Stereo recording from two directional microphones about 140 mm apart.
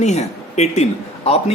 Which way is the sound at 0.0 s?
55° left (ahead or behind).